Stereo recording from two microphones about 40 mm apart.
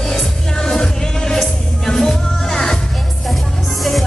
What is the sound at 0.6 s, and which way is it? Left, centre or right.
Music, centre.